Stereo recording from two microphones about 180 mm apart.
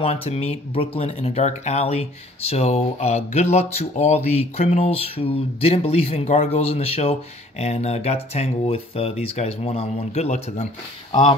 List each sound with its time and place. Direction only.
0.0 s speech: 35° left (ahead or behind)